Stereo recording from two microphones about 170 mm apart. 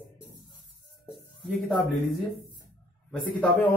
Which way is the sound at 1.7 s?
Centre (ahead or behind).